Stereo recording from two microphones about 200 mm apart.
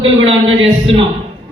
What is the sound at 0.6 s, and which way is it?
Speech, 25° right (ahead or behind).